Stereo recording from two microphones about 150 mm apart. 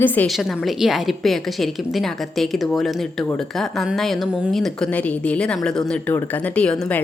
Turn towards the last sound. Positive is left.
turn(degrees=5)  # may be behind; listen again after turning